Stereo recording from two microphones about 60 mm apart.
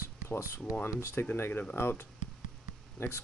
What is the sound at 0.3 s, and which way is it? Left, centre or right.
Speech, left.